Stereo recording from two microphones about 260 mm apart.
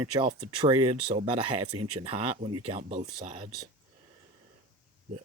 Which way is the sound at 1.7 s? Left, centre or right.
Right.